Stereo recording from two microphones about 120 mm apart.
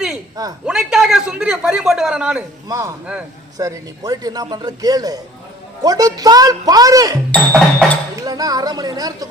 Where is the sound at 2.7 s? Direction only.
25° right (ahead or behind).